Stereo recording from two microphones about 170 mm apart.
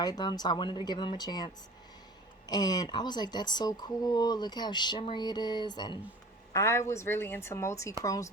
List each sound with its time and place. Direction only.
0.0 s speech: 25° left (ahead or behind)
2.5 s a woman's voice: 25° left (ahead or behind)